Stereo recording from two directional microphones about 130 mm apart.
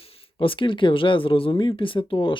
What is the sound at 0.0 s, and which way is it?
Speech, 45° left (ahead or behind).